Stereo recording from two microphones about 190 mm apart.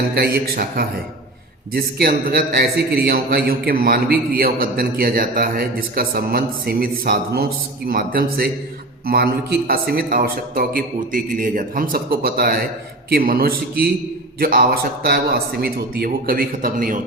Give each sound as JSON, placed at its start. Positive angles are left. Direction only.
{"t": 0.2, "sound": "a man's voice", "side_deg": -55}